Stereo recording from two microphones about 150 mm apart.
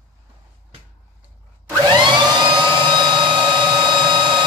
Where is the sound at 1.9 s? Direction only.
30° right (ahead or behind).